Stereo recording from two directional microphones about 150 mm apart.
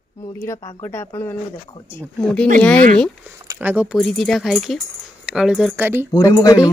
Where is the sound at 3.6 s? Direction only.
10° right (ahead or behind).